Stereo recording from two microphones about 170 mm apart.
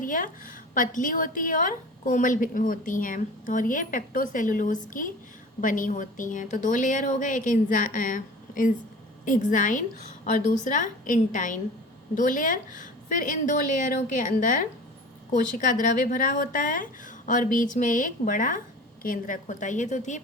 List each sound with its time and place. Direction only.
0.0 s a woman's voice: 50° left (ahead or behind)